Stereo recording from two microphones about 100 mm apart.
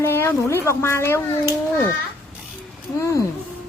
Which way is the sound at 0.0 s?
25° left (ahead or behind).